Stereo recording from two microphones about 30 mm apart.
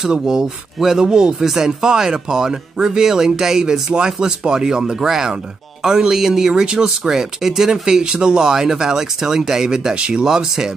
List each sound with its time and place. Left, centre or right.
0.9 s speech: right
6.5 s speech: right
8.0 s speech: right
8.4 s speech: centre
9.9 s speech: right
10.2 s speech: centre